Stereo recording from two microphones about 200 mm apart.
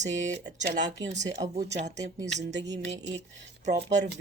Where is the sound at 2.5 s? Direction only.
60° right (ahead or behind).